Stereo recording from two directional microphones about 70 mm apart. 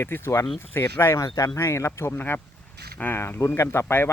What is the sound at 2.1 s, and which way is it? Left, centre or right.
Speech, left.